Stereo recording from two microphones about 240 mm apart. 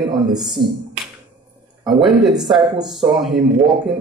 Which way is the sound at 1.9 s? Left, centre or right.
Centre.